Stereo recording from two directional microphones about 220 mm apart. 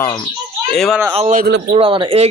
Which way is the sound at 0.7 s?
Centre (ahead or behind).